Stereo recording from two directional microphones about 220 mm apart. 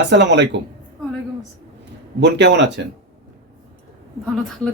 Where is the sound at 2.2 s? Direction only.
55° right (ahead or behind).